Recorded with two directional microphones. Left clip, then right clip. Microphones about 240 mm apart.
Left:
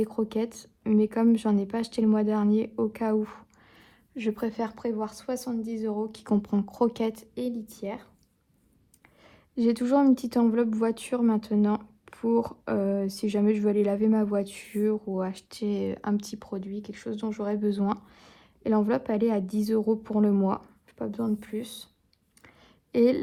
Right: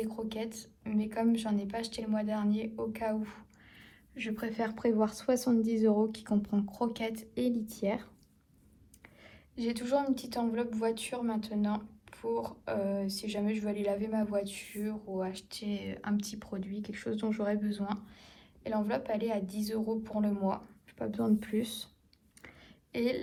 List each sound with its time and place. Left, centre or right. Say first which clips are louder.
0.0 s speech: left 9 dB; left; by 6.1 s centre
6.1 s speech: left 6 dB; left
9.2 s speech: left 10 dB; left
21.0 s speech: left 1 dB; centre
22.4 s a sound: right 1 dB; left